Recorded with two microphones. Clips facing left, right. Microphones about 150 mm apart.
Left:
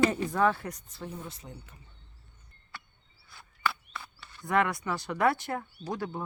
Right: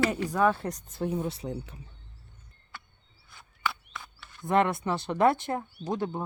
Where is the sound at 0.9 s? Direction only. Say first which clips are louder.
Right 10 dB; 50° right (ahead or behind).